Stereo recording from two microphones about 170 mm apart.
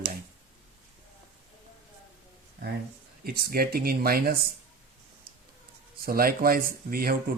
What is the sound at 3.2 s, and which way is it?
Speech, 65° right (ahead or behind).